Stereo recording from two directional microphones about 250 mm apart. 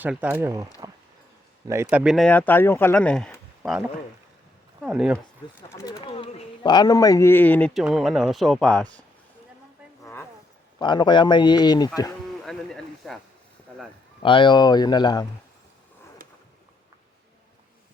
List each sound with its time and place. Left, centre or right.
0.0 s speech: centre
5.6 s a man's voice: centre
10.0 s a sound: centre
10.8 s a man's voice: centre
12.5 s a sound: centre
14.2 s a man's voice: centre